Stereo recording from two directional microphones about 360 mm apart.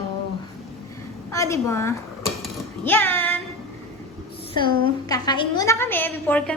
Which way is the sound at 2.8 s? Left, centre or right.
Centre.